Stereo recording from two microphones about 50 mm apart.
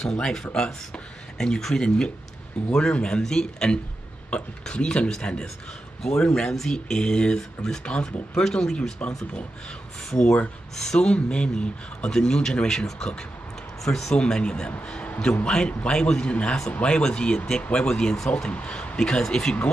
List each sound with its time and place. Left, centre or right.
0.0 s speech: centre
9.0 s a man's voice: left
10.1 s speech: centre
14.1 s a man's voice: centre
18.5 s speech: left